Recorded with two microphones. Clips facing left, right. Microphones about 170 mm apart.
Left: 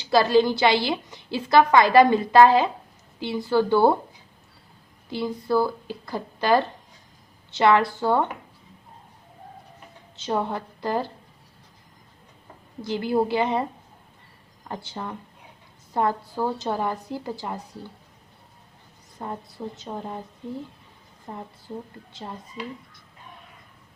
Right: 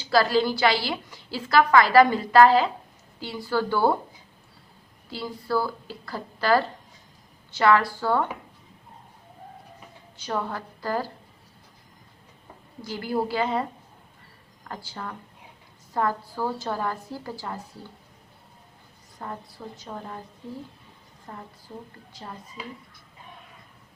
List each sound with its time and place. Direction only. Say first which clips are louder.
0.1 s a woman's voice: left 3 dB; 20° left (ahead or behind)
5.0 s a woman's voice: left 5 dB; 20° left (ahead or behind)
10.2 s a woman's voice: left 4 dB; 25° left (ahead or behind)
12.8 s a woman's voice: left 4 dB; 20° left (ahead or behind)
19.2 s a woman's voice: left 4 dB; 20° left (ahead or behind)
21.3 s a woman's voice: left 5 dB; 20° left (ahead or behind)